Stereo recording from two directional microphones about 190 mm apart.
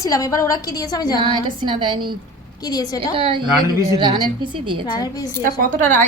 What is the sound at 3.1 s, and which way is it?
A woman's voice, 30° right (ahead or behind).